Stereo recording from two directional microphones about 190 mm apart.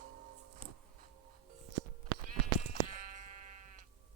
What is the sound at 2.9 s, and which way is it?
Sheep, 40° right (ahead or behind).